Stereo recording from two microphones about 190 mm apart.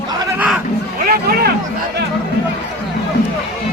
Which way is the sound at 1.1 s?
55° right (ahead or behind).